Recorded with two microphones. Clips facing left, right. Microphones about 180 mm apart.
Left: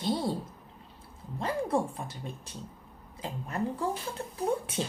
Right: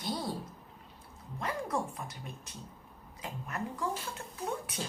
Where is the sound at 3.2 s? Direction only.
30° left (ahead or behind).